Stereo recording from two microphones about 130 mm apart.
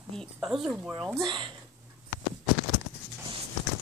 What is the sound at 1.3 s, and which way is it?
Speech, 40° right (ahead or behind).